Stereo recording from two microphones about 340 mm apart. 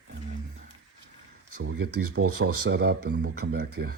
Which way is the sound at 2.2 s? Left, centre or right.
Right.